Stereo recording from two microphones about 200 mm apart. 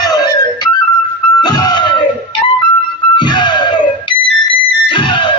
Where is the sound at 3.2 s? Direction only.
20° left (ahead or behind).